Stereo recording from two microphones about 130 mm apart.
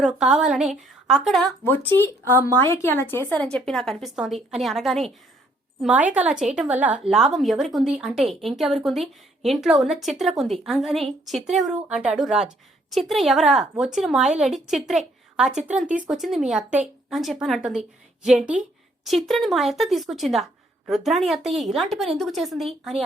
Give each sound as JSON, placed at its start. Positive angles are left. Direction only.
{"t": 0.0, "sound": "a woman's voice", "side_deg": -5}
{"t": 1.6, "sound": "speech", "side_deg": 15}
{"t": 2.2, "sound": "a woman's voice", "side_deg": -20}
{"t": 2.6, "sound": "a woman's voice", "side_deg": 15}
{"t": 5.8, "sound": "a woman's voice", "side_deg": -10}